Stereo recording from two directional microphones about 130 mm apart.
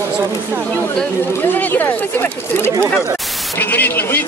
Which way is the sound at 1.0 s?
15° left (ahead or behind).